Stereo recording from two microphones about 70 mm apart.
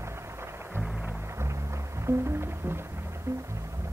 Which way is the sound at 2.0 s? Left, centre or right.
Right.